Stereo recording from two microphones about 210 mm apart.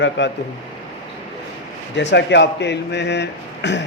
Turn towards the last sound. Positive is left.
turn(degrees=55)  # may be behind; listen again after turning